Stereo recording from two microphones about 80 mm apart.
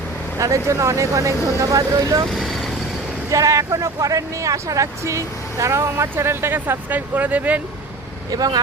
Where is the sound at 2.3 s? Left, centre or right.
Centre.